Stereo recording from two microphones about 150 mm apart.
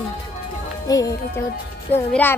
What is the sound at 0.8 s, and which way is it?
Speech, 25° left (ahead or behind).